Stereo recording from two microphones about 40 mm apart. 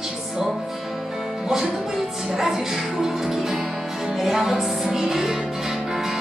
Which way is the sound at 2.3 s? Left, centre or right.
Centre.